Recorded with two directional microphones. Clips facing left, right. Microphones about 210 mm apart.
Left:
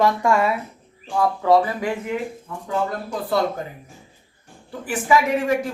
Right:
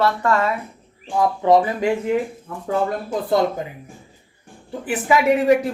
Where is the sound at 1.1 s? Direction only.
20° right (ahead or behind).